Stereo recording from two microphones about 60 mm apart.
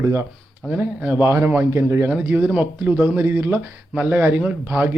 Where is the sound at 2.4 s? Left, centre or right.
Centre.